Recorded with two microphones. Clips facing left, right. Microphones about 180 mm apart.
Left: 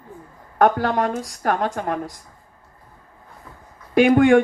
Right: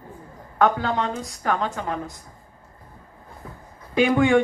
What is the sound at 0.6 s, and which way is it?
Speech, 60° left (ahead or behind).